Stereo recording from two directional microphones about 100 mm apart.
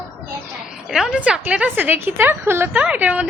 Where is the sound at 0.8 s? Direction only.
5° right (ahead or behind).